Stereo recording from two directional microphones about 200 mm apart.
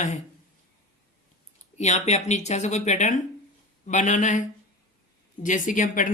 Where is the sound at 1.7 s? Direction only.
35° left (ahead or behind).